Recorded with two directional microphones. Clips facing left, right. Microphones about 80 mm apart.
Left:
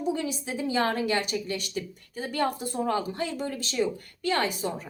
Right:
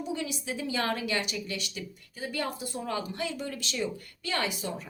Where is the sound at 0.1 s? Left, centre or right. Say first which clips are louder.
Left 5 dB; left.